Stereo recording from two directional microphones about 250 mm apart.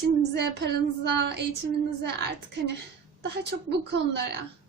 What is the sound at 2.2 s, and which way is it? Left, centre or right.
Speech, right.